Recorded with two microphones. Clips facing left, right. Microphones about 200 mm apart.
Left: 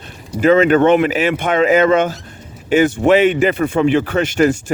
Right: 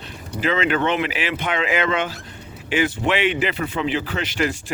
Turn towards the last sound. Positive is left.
turn(degrees=45)  # may be behind; listen again after turning